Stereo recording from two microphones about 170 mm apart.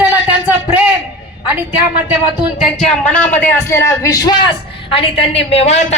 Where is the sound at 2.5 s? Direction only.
5° left (ahead or behind).